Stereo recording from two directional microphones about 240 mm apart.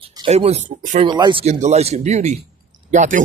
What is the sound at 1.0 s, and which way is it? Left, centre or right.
Speech, centre.